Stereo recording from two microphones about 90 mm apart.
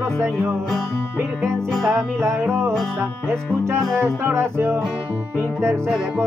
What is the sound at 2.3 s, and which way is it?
Music, 25° right (ahead or behind).